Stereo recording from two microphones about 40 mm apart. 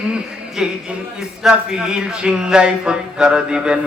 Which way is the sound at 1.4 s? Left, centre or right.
Centre.